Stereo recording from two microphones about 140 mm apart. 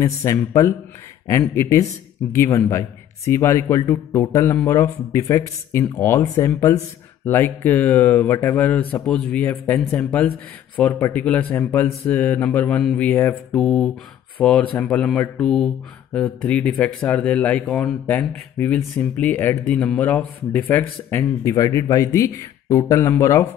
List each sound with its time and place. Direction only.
0.0 s speech: 25° left (ahead or behind)